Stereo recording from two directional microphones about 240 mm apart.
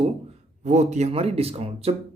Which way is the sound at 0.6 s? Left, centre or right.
Right.